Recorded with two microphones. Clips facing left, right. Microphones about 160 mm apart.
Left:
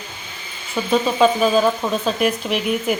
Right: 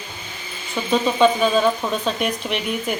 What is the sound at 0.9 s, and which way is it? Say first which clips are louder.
Speech: left 1 dB; 5° left (ahead or behind).